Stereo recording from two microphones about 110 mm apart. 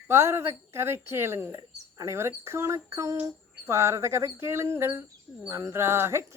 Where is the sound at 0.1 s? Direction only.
25° right (ahead or behind).